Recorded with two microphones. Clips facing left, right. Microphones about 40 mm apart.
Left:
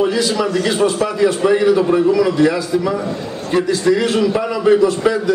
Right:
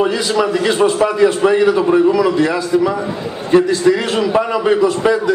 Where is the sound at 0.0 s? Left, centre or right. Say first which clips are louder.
Right 1 dB; centre.